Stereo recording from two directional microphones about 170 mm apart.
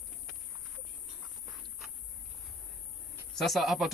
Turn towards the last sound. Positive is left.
turn(degrees=0)  # may be behind; listen again after turning